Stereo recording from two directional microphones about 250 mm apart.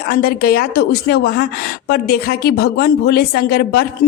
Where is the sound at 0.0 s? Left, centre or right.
Left.